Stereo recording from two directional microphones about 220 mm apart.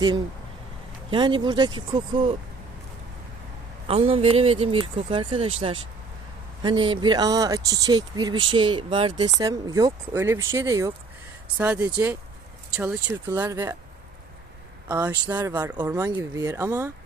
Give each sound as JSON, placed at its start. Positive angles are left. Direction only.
{"t": 1.1, "sound": "speech", "side_deg": -20}
{"t": 3.8, "sound": "speech", "side_deg": -25}
{"t": 14.8, "sound": "speech", "side_deg": -10}